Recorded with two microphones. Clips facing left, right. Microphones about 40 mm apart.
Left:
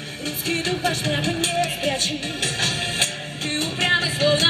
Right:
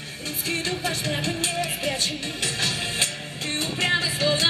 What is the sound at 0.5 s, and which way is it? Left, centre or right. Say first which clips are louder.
Music: left 4 dB; centre.